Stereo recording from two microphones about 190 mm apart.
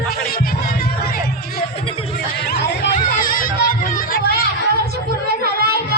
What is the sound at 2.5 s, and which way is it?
Chatter, 50° left (ahead or behind).